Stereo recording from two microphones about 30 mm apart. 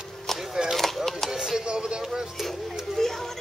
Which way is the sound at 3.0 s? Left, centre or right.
Centre.